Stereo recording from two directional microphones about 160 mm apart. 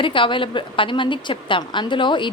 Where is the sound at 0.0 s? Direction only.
30° left (ahead or behind).